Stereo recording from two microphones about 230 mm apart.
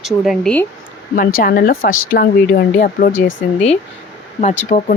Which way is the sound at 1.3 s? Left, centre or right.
Left.